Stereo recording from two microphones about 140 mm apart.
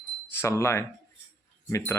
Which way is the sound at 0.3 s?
20° left (ahead or behind).